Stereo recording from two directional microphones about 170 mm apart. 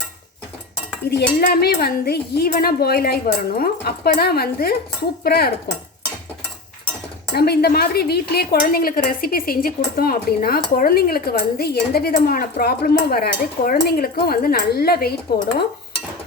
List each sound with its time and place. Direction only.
1.1 s dishes: 65° left (ahead or behind)
2.5 s a woman's voice: 60° left (ahead or behind)
5.2 s dishes: 65° left (ahead or behind)
7.3 s a woman's voice: 70° left (ahead or behind)